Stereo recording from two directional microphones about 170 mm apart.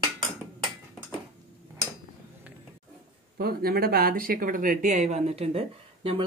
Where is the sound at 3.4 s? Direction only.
60° right (ahead or behind); by 6.3 s 35° right (ahead or behind).